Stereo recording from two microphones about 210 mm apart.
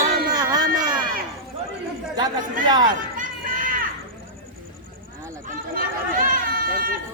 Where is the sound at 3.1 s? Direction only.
40° right (ahead or behind).